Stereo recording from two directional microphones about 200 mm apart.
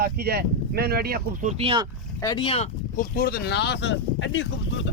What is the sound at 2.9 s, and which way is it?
Speech, 45° left (ahead or behind).